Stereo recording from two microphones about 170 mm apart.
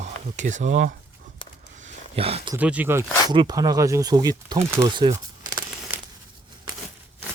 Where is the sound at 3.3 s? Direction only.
25° right (ahead or behind).